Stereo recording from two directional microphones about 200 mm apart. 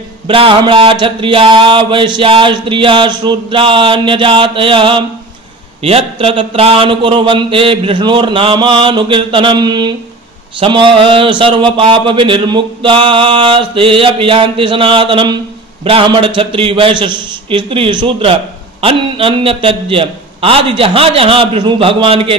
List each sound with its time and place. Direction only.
0.3 s a man's voice: 25° right (ahead or behind)